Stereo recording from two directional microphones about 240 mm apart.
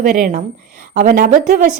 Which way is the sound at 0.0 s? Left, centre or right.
Right.